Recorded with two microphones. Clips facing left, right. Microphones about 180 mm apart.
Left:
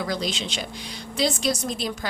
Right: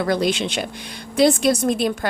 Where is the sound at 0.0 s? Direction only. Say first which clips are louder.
Right 8 dB; 60° right (ahead or behind).